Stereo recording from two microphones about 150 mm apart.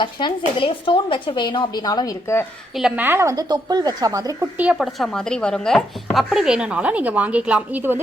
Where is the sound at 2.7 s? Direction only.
5° right (ahead or behind).